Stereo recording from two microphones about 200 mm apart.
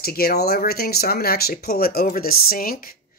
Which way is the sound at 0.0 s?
50° left (ahead or behind).